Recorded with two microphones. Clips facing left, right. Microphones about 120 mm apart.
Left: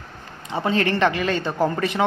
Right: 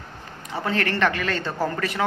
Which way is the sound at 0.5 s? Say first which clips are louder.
Left 4 dB; 20° left (ahead or behind).